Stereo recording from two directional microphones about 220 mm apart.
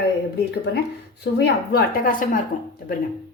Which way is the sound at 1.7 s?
40° left (ahead or behind).